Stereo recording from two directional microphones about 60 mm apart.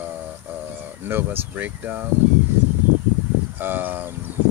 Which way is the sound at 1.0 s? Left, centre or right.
Right.